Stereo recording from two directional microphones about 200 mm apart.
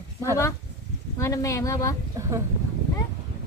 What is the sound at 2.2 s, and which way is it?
Speech, 15° right (ahead or behind).